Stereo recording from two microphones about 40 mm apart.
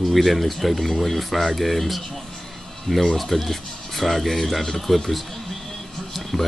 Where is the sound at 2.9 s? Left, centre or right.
Centre.